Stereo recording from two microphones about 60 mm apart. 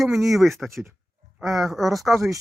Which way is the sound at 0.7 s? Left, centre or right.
Right.